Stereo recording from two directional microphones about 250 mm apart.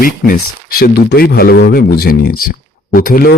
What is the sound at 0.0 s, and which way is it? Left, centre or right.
Speech, left.